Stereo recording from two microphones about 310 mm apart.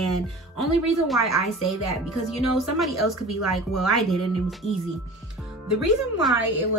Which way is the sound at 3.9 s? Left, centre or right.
Centre.